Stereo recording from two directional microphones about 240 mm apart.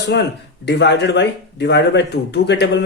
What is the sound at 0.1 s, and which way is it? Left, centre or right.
Speech, left.